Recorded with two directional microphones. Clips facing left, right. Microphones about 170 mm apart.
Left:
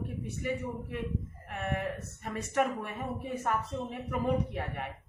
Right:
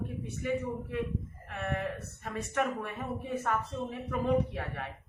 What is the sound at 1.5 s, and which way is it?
A woman's voice, 15° left (ahead or behind).